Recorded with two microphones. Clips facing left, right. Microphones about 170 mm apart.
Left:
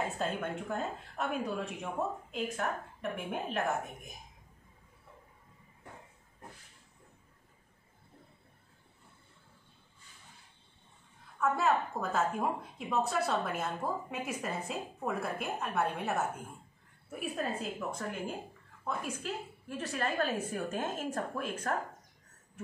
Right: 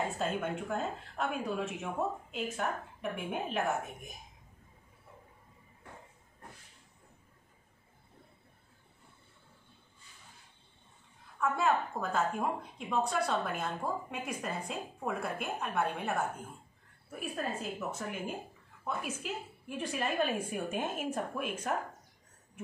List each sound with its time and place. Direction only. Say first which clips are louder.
0.2 s a woman's voice: right 1 dB; 5° right (ahead or behind)
11.3 s a woman's voice: left 1 dB; centre (ahead or behind)